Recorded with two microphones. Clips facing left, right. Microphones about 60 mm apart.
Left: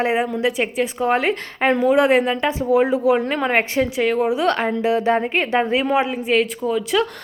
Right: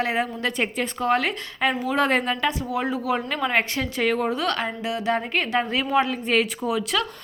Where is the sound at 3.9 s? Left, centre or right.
Centre.